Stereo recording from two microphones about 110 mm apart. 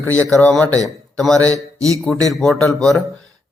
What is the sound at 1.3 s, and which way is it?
Speech, 30° right (ahead or behind).